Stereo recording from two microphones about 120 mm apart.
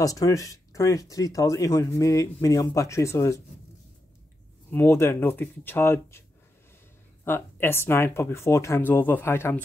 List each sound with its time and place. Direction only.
0.0 s speech: 30° left (ahead or behind)
4.6 s speech: 20° left (ahead or behind)
7.2 s speech: 20° left (ahead or behind)